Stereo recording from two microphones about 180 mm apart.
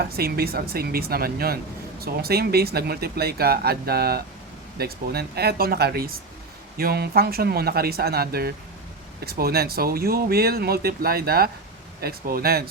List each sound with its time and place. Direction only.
0.0 s speech: 60° right (ahead or behind)